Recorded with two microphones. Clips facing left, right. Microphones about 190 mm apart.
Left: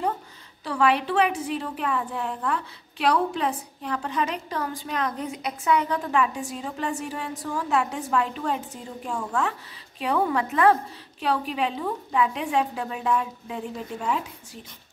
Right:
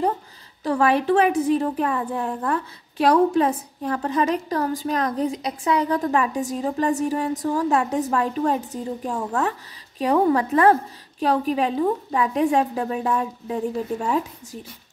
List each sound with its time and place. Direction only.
0.7 s a woman's voice: 45° right (ahead or behind)